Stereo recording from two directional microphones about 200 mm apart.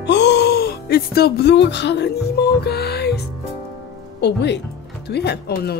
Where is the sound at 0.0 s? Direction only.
60° left (ahead or behind).